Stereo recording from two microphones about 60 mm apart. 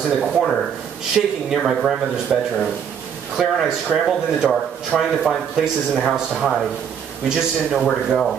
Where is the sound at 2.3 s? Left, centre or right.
Centre.